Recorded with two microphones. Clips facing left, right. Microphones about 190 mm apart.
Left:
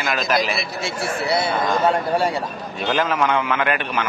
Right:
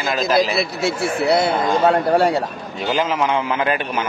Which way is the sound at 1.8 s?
65° right (ahead or behind).